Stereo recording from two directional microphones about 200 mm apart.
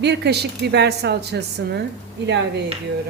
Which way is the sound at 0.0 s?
55° right (ahead or behind).